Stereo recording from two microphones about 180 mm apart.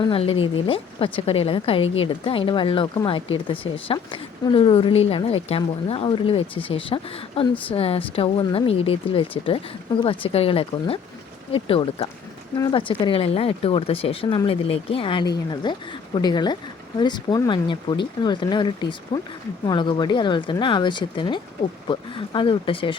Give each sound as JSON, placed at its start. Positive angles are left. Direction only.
{"t": 0.0, "sound": "a woman's voice", "side_deg": 30}